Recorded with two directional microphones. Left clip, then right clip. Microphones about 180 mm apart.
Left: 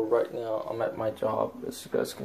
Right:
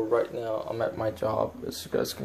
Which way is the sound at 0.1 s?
10° left (ahead or behind).